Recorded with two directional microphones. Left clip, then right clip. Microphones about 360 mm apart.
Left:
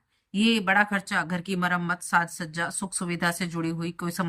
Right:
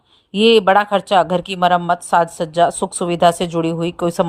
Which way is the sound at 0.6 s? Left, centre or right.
Right.